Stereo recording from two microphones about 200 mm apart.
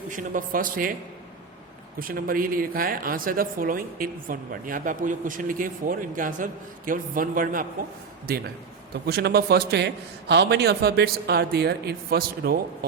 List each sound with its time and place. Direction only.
0.1 s speech: 40° right (ahead or behind)
2.0 s speech: 45° right (ahead or behind)